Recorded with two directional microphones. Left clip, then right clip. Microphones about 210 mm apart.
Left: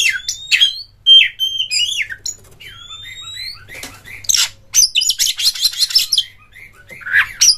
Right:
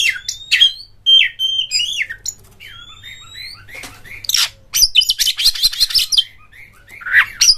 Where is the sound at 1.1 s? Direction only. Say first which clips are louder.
Left 2 dB; 15° left (ahead or behind).